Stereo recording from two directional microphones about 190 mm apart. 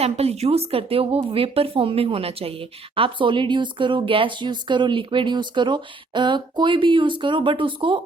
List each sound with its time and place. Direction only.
0.0 s speech: 35° right (ahead or behind)